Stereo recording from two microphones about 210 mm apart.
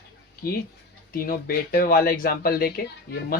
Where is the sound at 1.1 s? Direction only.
45° left (ahead or behind).